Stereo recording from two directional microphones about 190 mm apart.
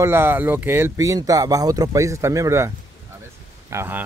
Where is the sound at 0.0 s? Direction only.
10° right (ahead or behind).